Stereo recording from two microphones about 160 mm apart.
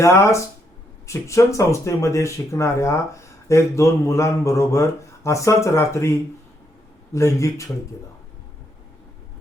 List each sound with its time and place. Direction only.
0.0 s speech: 20° left (ahead or behind)